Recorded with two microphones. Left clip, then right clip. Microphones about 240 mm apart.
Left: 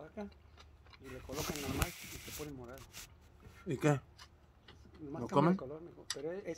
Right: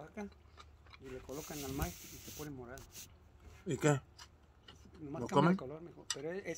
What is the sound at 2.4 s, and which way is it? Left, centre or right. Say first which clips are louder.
Speech: right 2 dB; right.